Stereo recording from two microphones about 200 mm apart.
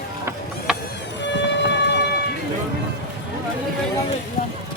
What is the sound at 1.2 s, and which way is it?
Siren, 60° left (ahead or behind).